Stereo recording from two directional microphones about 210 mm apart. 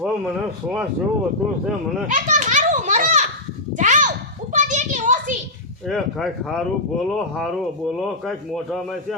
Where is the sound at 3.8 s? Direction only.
35° right (ahead or behind).